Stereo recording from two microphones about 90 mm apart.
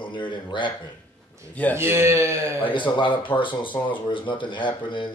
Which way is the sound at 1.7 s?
25° right (ahead or behind).